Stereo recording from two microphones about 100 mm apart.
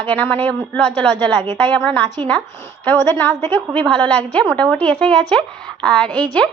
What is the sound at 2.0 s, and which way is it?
Speech, 45° right (ahead or behind).